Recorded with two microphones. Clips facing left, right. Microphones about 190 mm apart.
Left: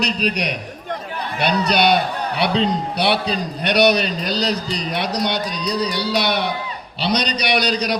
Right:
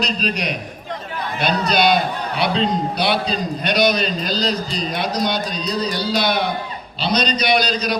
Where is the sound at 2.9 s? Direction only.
65° left (ahead or behind).